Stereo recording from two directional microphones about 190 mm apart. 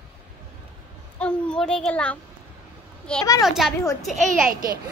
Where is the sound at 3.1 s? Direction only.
5° left (ahead or behind).